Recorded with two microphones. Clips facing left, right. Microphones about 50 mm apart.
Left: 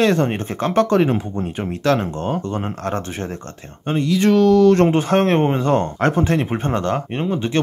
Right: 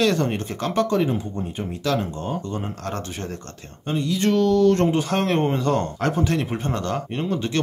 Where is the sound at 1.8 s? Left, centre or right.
Left.